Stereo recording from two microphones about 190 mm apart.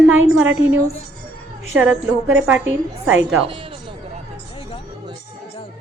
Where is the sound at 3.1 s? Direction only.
5° right (ahead or behind).